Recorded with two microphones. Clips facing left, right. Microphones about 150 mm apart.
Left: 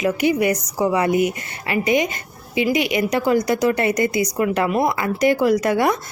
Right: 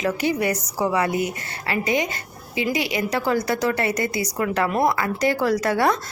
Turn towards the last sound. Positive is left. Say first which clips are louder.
# left 3 dB
turn(degrees=15)  # may be behind; listen again after turning